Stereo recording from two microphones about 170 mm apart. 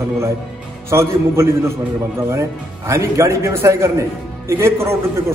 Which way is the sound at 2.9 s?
15° right (ahead or behind).